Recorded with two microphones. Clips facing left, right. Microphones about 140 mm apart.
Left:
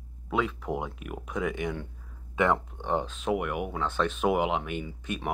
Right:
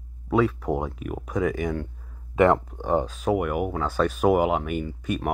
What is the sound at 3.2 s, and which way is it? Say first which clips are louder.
Speech: right 5 dB; 5° right (ahead or behind).